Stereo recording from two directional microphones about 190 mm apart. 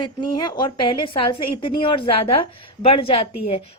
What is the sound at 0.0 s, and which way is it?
A woman's voice, 25° left (ahead or behind).